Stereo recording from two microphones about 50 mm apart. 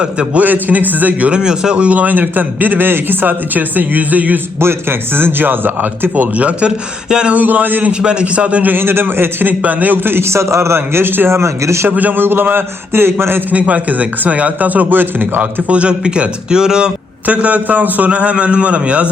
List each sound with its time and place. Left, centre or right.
0.0 s a man's voice: right
0.4 s a man's voice: right
1.3 s a man's voice: centre; by 4.4 s right
4.6 s a man's voice: right; by 7.3 s centre
7.3 s a man's voice: right
7.9 s a man's voice: centre
8.7 s a man's voice: right
10.2 s speech: right
11.9 s a man's voice: right
13.5 s a man's voice: right
15.4 s a man's voice: right
17.2 s a man's voice: right